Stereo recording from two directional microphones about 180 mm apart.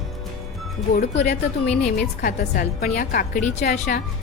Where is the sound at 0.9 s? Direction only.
40° left (ahead or behind).